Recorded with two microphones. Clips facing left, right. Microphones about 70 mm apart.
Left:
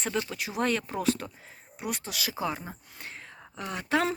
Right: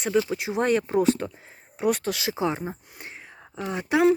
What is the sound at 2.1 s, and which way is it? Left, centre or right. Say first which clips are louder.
Speech: right 6 dB; right.